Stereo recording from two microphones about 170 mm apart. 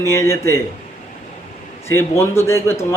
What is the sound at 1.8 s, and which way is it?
Speech, 15° left (ahead or behind).